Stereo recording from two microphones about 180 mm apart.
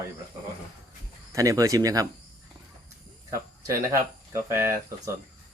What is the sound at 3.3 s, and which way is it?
Speech, 15° right (ahead or behind).